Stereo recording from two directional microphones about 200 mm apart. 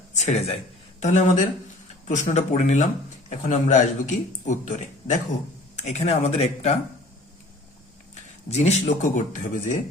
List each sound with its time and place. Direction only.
0.1 s a sound: 35° left (ahead or behind)
0.9 s speech: 35° left (ahead or behind)
8.4 s speech: 35° left (ahead or behind)